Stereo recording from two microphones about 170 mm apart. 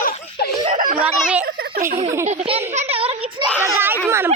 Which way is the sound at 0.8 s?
55° right (ahead or behind).